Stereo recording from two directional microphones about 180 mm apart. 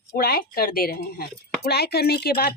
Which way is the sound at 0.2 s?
55° left (ahead or behind).